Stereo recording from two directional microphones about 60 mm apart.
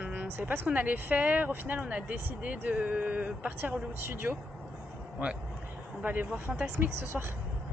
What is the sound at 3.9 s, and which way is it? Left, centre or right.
Speech, right.